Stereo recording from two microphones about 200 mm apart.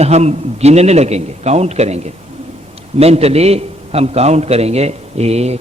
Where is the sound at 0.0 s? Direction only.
35° right (ahead or behind).